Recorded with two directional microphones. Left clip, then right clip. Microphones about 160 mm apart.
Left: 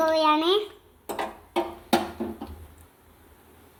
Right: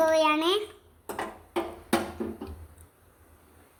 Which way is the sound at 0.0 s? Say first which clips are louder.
Left 1 dB; 25° right (ahead or behind).